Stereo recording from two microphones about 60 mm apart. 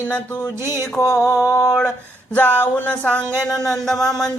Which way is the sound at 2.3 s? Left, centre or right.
Left.